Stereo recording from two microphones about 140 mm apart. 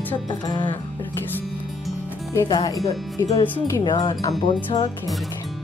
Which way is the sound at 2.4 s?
30° left (ahead or behind).